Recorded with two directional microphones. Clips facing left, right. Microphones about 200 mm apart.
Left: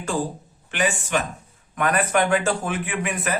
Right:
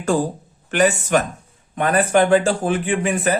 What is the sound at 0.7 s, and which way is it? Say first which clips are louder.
Speech: right 7 dB; 40° right (ahead or behind).